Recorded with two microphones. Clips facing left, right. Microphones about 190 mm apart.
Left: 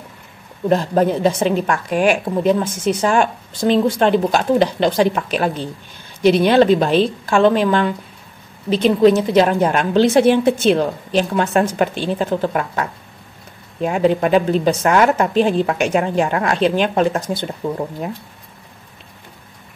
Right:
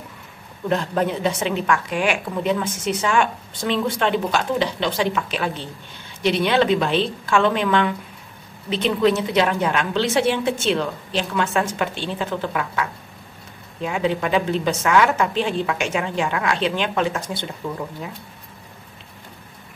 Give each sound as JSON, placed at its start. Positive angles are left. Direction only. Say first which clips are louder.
{"t": 0.7, "sound": "a woman's voice", "louder": "left 6 dB", "side_deg": 40}